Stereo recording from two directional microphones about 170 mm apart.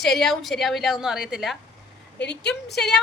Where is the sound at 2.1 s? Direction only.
90° left.